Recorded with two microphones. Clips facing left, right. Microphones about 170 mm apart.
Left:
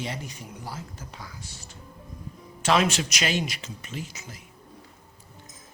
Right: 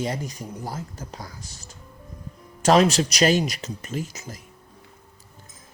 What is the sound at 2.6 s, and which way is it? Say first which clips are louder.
Speech: right 6 dB; 40° right (ahead or behind).